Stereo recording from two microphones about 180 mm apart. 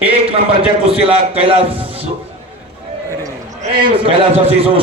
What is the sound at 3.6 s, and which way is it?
A man's voice, 30° right (ahead or behind).